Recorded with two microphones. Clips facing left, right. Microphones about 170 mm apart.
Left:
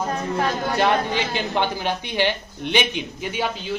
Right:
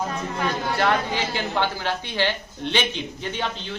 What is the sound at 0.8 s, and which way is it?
A woman's voice, 20° left (ahead or behind).